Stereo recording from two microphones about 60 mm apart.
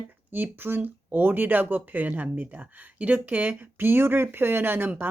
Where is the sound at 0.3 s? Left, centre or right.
Right.